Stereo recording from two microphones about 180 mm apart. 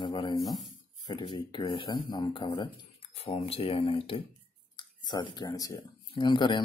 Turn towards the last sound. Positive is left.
turn(degrees=25)  # may be behind; listen again after turning